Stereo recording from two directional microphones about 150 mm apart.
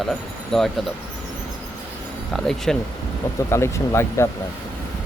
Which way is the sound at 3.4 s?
20° left (ahead or behind).